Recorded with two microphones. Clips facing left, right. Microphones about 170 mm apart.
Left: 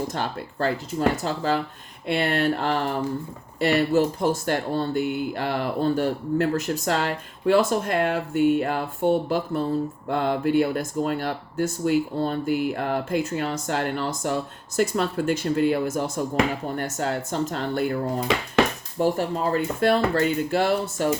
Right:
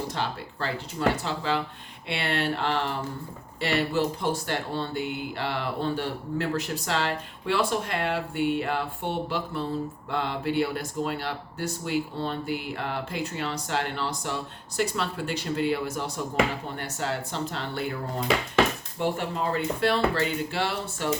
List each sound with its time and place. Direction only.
0.1 s speech: 45° left (ahead or behind)
18.9 s speech: 40° left (ahead or behind)